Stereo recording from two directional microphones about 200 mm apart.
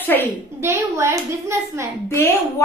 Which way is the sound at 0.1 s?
10° left (ahead or behind).